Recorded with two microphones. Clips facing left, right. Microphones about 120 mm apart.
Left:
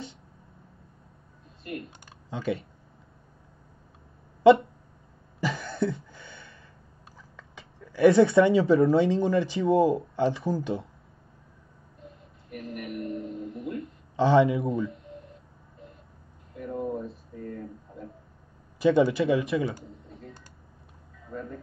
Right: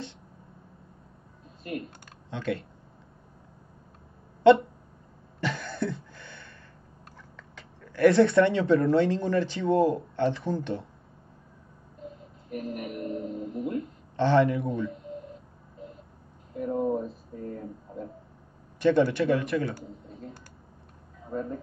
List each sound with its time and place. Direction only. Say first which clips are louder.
2.2 s speech: left 1 dB; centre (ahead or behind)
4.4 s a sound: left 1 dB; centre (ahead or behind)
5.4 s cough: left 2 dB; centre (ahead or behind)
7.3 s speech: left 1 dB; 5° left (ahead or behind)
12.8 s a sound: even; 30° right (ahead or behind)
13.3 s guitar: right 3 dB; centre (ahead or behind)
14.1 s a man's voice: left 2 dB; 5° left (ahead or behind)
16.5 s a sound: right 5 dB; 40° right (ahead or behind)
18.8 s a man's voice: left 1 dB; centre (ahead or behind)
21.3 s speech: right 5 dB; 40° right (ahead or behind)